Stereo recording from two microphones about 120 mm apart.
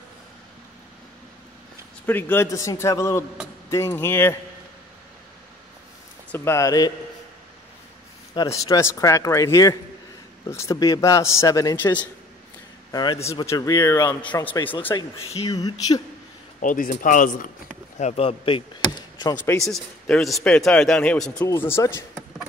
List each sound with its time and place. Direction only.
2.0 s speech: 15° left (ahead or behind)
6.3 s speech: 20° left (ahead or behind)
8.5 s speech: 30° left (ahead or behind)
11.7 s a man's voice: 15° left (ahead or behind)
12.9 s speech: 40° left (ahead or behind)
13.5 s speech: 30° left (ahead or behind)
14.2 s a man's voice: 15° left (ahead or behind)
14.5 s speech: 45° left (ahead or behind)
15.5 s speech: 35° left (ahead or behind)
16.5 s a man's voice: 90° left
17.9 s speech: 65° left (ahead or behind)
19.6 s a man's voice: 5° left (ahead or behind)
21.5 s speech: 20° left (ahead or behind)